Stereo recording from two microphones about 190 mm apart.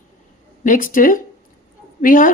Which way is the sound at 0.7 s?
45° left (ahead or behind).